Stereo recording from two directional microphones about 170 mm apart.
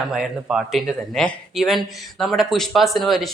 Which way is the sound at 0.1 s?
5° right (ahead or behind).